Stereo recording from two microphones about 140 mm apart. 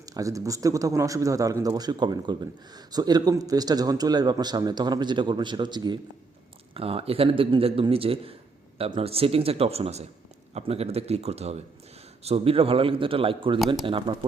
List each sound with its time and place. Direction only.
0.0 s speech: 25° right (ahead or behind)
6.7 s a man's voice: 45° right (ahead or behind)